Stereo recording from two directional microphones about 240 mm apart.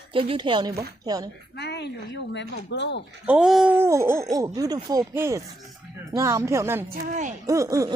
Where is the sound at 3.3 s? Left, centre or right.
Centre.